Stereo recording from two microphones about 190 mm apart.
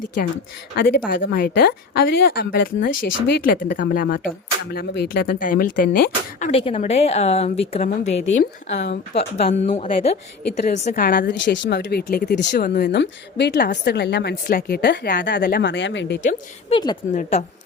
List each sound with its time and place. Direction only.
0.8 s speech: 50° left (ahead or behind)
6.5 s a woman's voice: 30° left (ahead or behind)
8.8 s a woman's voice: 65° left (ahead or behind)
9.4 s a woman's voice: 35° left (ahead or behind)
10.7 s speech: 45° left (ahead or behind)
11.4 s a woman's voice: 70° left (ahead or behind)
12.6 s a woman's voice: 50° left (ahead or behind)
16.7 s speech: 25° left (ahead or behind)
17.2 s a woman's voice: 40° left (ahead or behind)